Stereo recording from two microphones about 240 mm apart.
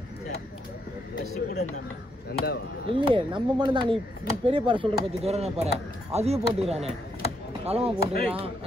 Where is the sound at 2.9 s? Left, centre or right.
Right.